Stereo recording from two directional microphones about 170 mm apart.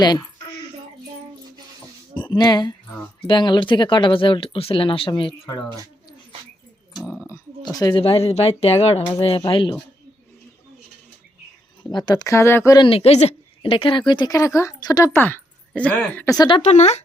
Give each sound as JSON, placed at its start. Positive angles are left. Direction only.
{"t": 0.0, "sound": "speech", "side_deg": 25}
{"t": 2.1, "sound": "speech", "side_deg": 25}
{"t": 7.0, "sound": "speech", "side_deg": -5}
{"t": 7.3, "sound": "speech", "side_deg": 20}
{"t": 11.8, "sound": "speech", "side_deg": 25}
{"t": 16.4, "sound": "speech", "side_deg": 30}
{"t": 16.6, "sound": "speech", "side_deg": 40}